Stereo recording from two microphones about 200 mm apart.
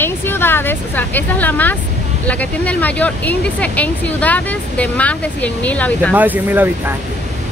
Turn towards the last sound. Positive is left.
turn(degrees=-10)  # may be behind; listen again after turning